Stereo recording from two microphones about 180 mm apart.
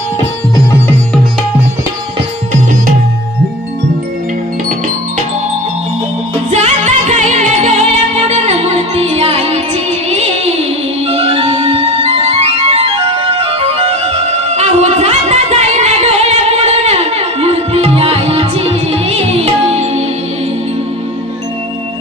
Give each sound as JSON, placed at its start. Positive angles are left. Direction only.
{"t": 6.5, "sound": "music", "side_deg": -40}